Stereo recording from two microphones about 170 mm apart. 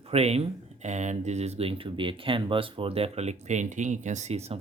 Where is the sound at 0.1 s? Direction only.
40° right (ahead or behind).